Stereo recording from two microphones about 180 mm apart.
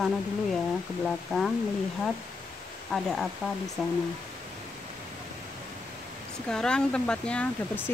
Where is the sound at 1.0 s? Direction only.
Centre (ahead or behind).